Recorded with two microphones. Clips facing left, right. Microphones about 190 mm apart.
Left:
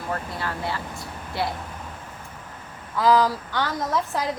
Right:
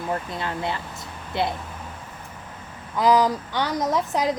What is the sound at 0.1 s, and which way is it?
A woman's voice, 20° right (ahead or behind).